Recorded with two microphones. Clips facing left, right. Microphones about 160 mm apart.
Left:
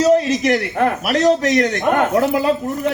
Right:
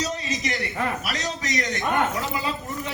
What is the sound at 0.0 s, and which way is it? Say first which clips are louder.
A man's voice: left 14 dB; 60° left (ahead or behind).